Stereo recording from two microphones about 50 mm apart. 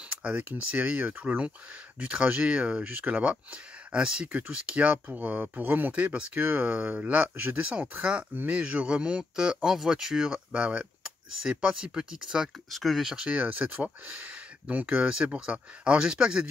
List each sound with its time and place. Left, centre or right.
0.2 s speech: right
2.8 s speech: right
3.9 s speech: centre; by 6.7 s right
6.7 s speech: right
10.5 s speech: right
12.7 s speech: centre
13.3 s speech: right; by 16.4 s centre